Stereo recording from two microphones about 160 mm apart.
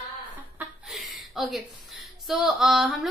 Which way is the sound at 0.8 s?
Centre (ahead or behind).